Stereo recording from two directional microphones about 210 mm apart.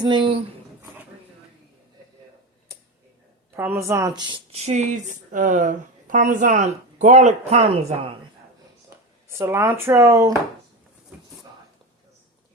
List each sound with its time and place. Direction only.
0.0 s speech: 20° right (ahead or behind)
3.5 s speech: 10° right (ahead or behind); by 8.2 s 30° right (ahead or behind)
9.4 s speech: 10° right (ahead or behind)